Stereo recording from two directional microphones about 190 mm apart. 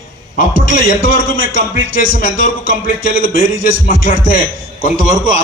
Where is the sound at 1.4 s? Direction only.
80° right.